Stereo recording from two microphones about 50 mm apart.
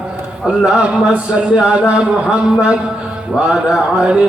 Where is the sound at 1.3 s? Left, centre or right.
Centre.